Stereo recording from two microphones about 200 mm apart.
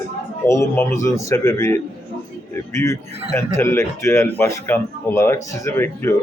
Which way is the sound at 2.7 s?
15° left (ahead or behind).